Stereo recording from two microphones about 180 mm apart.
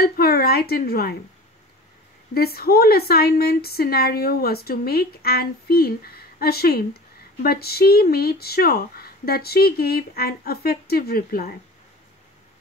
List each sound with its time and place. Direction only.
0.0 s a woman's voice: 60° left (ahead or behind)
2.3 s a woman's voice: 60° left (ahead or behind)